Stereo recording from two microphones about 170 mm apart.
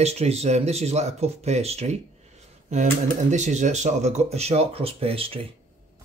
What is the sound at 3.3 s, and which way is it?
Speech, 45° right (ahead or behind).